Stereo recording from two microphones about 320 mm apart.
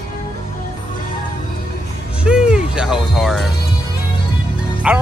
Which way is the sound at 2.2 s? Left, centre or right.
Centre.